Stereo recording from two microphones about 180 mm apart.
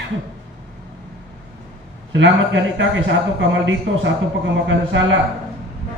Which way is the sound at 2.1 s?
90° right.